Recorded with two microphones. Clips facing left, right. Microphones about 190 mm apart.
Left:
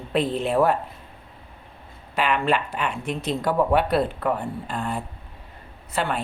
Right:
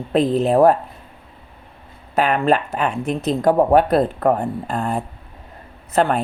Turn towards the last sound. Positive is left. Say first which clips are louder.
# right 8 dB
turn(degrees=-45)  # may be behind; listen again after turning